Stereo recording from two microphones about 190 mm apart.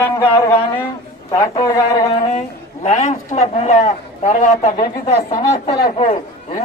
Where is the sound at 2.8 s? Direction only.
40° left (ahead or behind).